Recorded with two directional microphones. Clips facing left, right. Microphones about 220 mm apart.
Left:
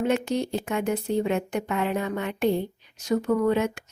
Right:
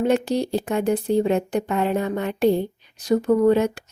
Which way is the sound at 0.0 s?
35° right (ahead or behind).